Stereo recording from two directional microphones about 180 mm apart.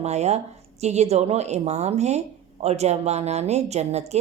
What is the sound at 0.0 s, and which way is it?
Speech, 40° right (ahead or behind).